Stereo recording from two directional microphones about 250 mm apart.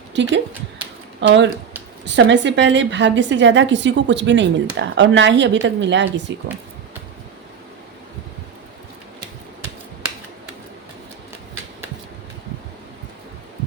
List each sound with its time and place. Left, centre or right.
0.1 s a woman's voice: right